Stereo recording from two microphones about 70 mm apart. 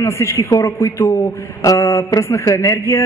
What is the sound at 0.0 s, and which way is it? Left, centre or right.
Speech, left.